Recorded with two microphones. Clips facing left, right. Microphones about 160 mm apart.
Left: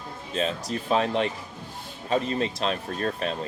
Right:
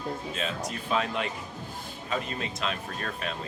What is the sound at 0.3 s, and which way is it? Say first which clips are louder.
Speech: left 5 dB; 35° left (ahead or behind).